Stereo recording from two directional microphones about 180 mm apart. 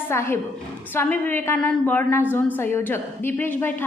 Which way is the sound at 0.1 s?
15° left (ahead or behind).